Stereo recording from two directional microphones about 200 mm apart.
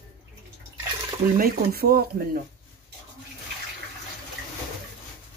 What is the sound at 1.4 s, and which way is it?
Speech, 50° right (ahead or behind).